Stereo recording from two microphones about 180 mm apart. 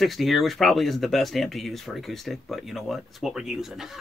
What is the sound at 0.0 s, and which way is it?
Speech, centre (ahead or behind).